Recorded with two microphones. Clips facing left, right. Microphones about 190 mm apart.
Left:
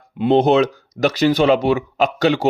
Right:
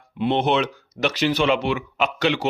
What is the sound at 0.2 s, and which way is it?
Speech, 40° left (ahead or behind).